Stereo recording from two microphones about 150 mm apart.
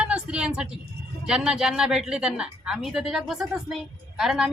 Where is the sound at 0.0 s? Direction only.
5° right (ahead or behind).